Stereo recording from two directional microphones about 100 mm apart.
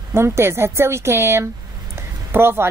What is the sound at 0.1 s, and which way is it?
A woman's voice, 25° right (ahead or behind).